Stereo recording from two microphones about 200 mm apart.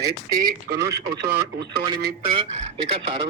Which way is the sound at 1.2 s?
55° right (ahead or behind).